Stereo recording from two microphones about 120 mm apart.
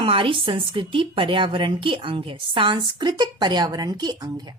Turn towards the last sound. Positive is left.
turn(degrees=-35)  # may be behind; listen again after turning